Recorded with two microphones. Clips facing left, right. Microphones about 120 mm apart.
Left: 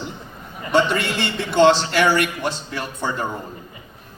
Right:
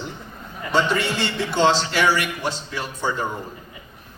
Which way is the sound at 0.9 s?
55° left (ahead or behind).